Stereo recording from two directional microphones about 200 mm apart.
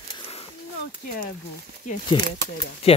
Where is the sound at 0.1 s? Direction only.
30° left (ahead or behind).